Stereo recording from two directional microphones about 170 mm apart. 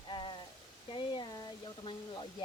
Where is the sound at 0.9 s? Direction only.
30° left (ahead or behind).